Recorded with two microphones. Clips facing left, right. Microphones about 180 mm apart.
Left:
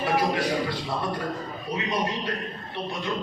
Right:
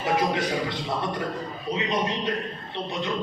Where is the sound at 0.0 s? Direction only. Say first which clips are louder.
Even; 20° right (ahead or behind).